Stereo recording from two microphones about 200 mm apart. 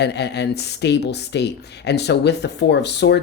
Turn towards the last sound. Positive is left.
turn(degrees=60)  # may be behind; listen again after turning